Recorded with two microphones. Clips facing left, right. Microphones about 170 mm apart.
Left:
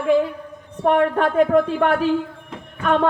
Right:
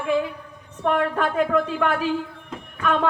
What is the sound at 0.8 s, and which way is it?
A man's voice, 40° left (ahead or behind).